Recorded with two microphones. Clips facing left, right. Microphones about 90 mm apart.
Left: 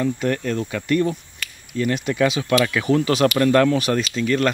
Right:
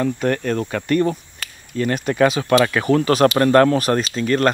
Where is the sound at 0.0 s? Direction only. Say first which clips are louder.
Right 2 dB; 50° right (ahead or behind).